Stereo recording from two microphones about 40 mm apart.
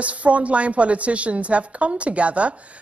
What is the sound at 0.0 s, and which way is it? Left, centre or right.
A woman's voice, right.